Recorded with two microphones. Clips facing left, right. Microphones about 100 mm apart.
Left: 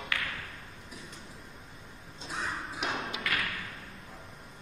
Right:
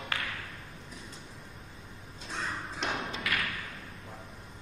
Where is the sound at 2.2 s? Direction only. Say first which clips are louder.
Left 1 dB; 5° left (ahead or behind).